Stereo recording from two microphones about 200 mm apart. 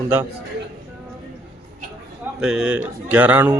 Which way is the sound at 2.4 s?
5° right (ahead or behind).